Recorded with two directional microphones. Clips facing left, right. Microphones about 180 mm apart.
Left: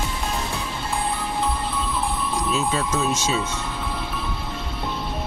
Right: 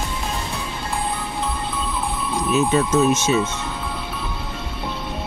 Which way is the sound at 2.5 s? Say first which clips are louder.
Right 8 dB; 25° right (ahead or behind).